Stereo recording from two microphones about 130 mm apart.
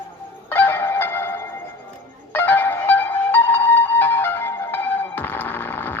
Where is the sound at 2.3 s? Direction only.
15° left (ahead or behind).